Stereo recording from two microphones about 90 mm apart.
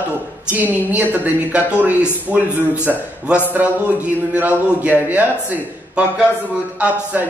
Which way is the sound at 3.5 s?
20° right (ahead or behind).